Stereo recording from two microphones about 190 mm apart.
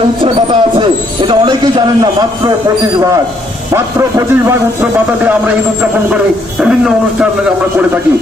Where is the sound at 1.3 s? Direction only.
25° right (ahead or behind).